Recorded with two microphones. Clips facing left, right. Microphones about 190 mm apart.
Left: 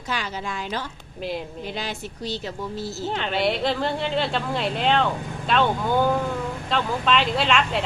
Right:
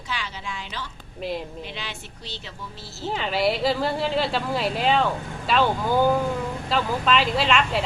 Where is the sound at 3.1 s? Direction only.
5° right (ahead or behind).